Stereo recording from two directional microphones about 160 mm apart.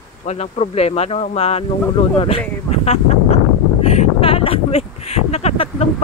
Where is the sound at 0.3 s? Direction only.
40° left (ahead or behind).